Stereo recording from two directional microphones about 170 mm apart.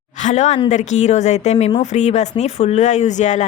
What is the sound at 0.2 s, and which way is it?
A woman's voice, 45° left (ahead or behind).